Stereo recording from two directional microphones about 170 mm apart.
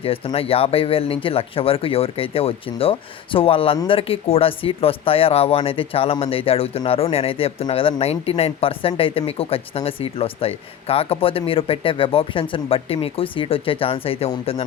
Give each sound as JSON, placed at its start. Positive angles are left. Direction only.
{"t": 0.0, "sound": "speech", "side_deg": 35}